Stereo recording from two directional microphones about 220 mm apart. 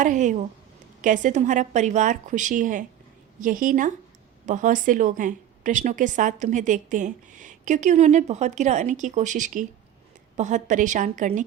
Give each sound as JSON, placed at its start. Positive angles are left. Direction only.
{"t": 0.0, "sound": "a woman's voice", "side_deg": -35}